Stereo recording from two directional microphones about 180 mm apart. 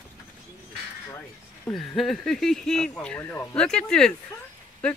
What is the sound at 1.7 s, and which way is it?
Speech, centre (ahead or behind).